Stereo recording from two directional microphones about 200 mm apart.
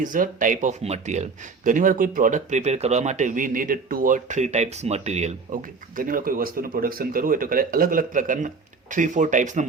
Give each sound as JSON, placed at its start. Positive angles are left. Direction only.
{"t": 0.0, "sound": "speech", "side_deg": -40}
{"t": 6.0, "sound": "speech", "side_deg": -45}